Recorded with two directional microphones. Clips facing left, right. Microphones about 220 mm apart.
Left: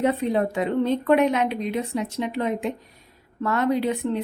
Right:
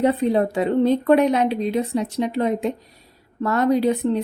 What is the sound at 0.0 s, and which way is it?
Speech, 35° right (ahead or behind).